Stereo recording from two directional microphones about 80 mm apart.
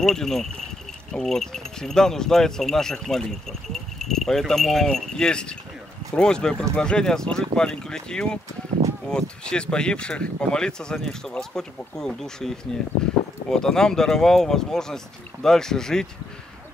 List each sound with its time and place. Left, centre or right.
0.0 s speech: centre
8.8 s a sound: right
9.1 s speech: centre